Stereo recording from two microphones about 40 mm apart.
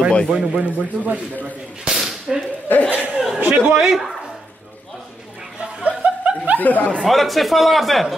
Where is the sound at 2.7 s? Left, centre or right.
Left.